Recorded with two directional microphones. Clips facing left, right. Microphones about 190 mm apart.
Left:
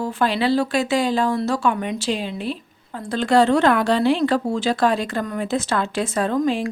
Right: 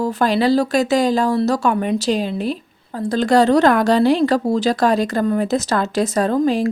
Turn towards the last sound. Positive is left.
turn(degrees=-40)  # may be behind; listen again after turning